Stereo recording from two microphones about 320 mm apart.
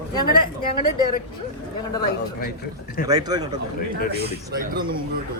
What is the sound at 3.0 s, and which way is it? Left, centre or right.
Speech, centre.